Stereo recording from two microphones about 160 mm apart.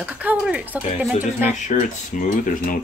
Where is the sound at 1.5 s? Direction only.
50° left (ahead or behind).